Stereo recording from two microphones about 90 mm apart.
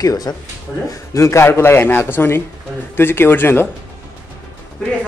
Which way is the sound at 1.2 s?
30° left (ahead or behind).